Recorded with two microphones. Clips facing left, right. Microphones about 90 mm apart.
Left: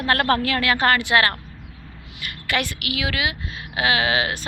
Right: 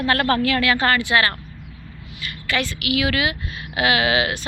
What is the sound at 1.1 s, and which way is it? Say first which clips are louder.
Speech: even; 35° left (ahead or behind).